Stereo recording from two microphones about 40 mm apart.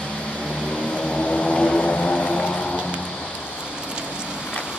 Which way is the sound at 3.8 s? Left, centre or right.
Right.